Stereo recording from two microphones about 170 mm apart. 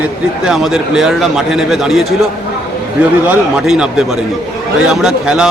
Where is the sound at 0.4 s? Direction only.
Centre (ahead or behind).